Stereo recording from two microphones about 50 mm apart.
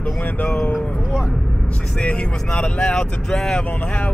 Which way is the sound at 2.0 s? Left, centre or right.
Left.